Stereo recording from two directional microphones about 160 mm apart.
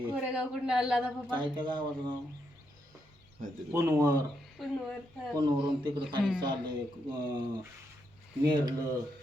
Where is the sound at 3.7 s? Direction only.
20° right (ahead or behind).